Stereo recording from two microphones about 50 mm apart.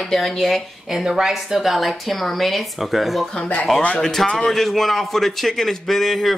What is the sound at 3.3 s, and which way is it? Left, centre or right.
Speech, left.